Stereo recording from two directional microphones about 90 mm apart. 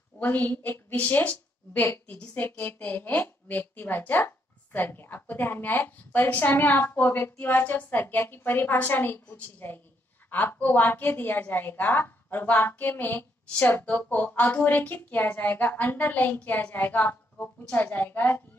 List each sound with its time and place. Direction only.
0.2 s a woman's voice: 20° left (ahead or behind)